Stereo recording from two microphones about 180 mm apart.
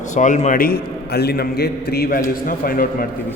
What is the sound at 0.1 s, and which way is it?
A man's voice, 45° left (ahead or behind).